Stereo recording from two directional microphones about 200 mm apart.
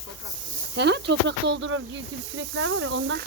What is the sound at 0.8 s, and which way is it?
Speech, 55° right (ahead or behind).